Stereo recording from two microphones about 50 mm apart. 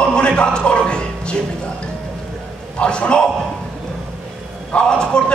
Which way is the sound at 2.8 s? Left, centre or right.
Left.